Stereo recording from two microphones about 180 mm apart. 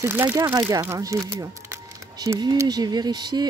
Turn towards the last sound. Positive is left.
turn(degrees=-25)  # may be behind; listen again after turning